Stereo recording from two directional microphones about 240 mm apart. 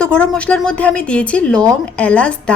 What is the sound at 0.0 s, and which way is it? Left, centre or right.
A woman's voice, centre.